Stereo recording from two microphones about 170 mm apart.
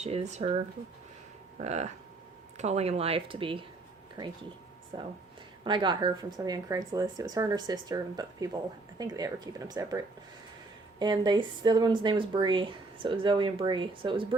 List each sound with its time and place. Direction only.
0.0 s speech: 40° right (ahead or behind)
1.6 s speech: 40° right (ahead or behind)
4.9 s speech: 25° right (ahead or behind)
11.0 s speech: 25° right (ahead or behind)